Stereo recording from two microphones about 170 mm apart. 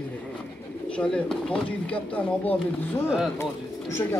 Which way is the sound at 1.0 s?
5° left (ahead or behind).